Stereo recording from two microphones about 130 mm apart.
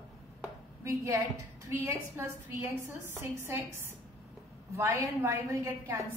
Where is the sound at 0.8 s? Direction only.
20° right (ahead or behind).